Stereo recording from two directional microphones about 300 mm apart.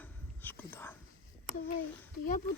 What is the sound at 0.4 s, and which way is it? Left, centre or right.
Whispering, centre.